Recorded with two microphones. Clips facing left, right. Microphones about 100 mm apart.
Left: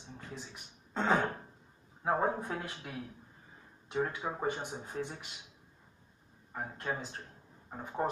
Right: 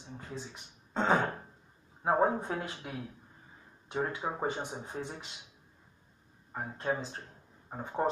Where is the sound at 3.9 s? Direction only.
25° right (ahead or behind).